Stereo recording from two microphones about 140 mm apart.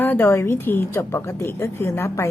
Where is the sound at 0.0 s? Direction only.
15° left (ahead or behind).